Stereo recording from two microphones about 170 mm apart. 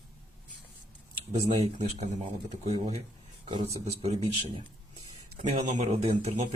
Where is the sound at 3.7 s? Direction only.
40° right (ahead or behind).